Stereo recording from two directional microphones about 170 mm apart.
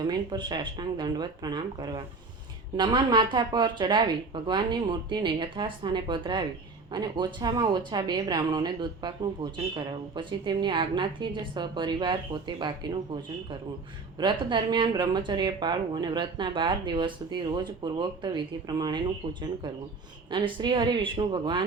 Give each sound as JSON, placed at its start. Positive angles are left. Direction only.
{"t": 0.0, "sound": "speech", "side_deg": -25}
{"t": 14.2, "sound": "speech", "side_deg": -25}